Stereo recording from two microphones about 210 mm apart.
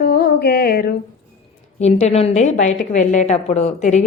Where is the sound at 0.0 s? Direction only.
45° left (ahead or behind).